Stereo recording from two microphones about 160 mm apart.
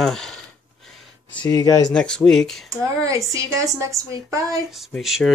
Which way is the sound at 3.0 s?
20° right (ahead or behind).